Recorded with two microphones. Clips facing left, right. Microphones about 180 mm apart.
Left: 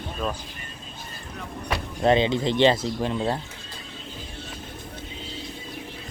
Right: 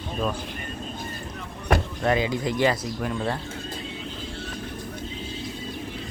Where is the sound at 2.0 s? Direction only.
25° left (ahead or behind).